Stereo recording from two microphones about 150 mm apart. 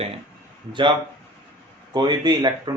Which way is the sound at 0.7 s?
30° right (ahead or behind).